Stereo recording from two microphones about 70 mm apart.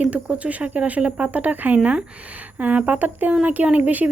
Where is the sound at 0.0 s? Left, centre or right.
Centre.